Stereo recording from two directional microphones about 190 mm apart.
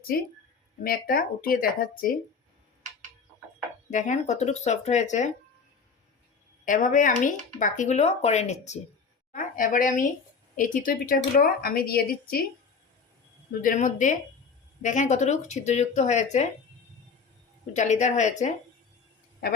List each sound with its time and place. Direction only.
0.9 s a woman's voice: 50° left (ahead or behind)
3.8 s speech: 40° left (ahead or behind)
6.7 s a woman's voice: 45° left (ahead or behind)
13.6 s a woman's voice: 45° left (ahead or behind)
17.7 s speech: 40° left (ahead or behind)